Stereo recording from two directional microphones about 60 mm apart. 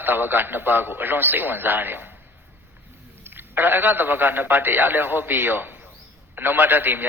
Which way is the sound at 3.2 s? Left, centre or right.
Right.